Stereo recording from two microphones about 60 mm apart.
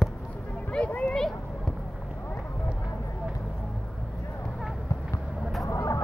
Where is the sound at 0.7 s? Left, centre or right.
Left.